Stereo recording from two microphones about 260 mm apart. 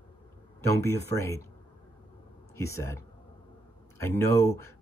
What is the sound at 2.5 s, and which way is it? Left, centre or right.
Speech, centre.